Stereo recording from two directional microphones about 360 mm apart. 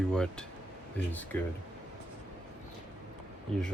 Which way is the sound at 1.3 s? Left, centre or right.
Centre.